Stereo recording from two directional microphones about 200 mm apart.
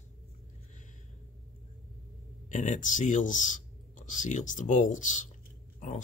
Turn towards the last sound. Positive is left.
turn(degrees=40)  # may be behind; listen again after turning